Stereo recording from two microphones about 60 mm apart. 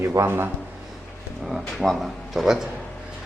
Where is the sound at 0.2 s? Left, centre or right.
Right.